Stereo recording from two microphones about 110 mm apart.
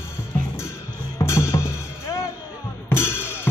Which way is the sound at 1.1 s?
25° left (ahead or behind).